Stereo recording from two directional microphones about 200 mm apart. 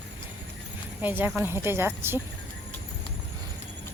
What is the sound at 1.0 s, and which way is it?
Speech, 10° right (ahead or behind).